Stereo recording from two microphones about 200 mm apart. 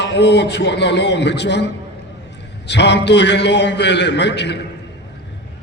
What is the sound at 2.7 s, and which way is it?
Speech, 60° left (ahead or behind).